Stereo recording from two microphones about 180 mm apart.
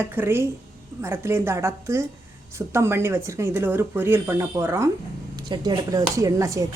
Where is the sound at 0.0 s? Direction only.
10° right (ahead or behind).